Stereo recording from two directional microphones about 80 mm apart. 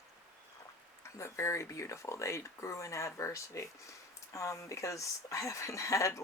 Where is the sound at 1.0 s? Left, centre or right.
Left.